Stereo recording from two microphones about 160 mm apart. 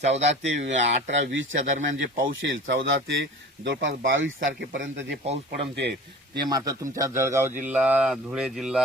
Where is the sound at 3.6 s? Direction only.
90° right.